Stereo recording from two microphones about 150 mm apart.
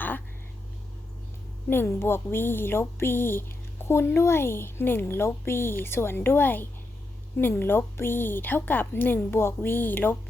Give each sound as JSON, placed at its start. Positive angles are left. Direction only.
{"t": 1.7, "sound": "speech", "side_deg": 15}